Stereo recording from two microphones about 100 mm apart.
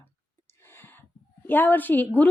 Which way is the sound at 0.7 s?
20° left (ahead or behind).